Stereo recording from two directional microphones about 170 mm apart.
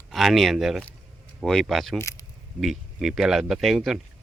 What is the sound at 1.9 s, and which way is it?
Speech, 15° left (ahead or behind).